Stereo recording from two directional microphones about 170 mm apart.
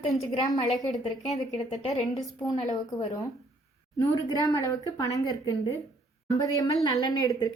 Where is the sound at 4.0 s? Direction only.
20° left (ahead or behind).